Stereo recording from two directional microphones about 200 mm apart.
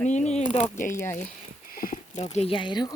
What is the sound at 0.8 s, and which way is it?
Speech, 15° left (ahead or behind).